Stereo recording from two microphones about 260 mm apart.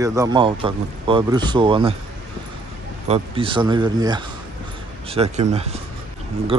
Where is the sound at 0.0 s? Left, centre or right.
Centre.